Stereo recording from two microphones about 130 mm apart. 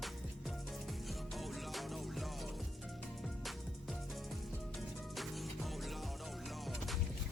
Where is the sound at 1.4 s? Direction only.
Centre (ahead or behind).